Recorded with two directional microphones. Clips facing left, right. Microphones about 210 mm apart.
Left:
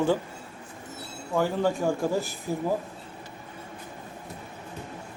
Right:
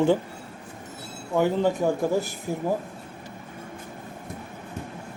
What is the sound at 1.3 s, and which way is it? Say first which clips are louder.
A man's voice: right 3 dB; 20° right (ahead or behind).